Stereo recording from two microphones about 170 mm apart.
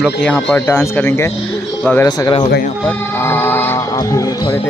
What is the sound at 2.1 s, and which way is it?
Speech, 25° left (ahead or behind).